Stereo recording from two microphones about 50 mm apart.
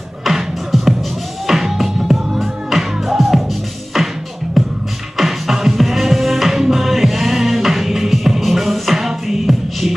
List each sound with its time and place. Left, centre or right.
0.2 s music: centre
4.6 s music: centre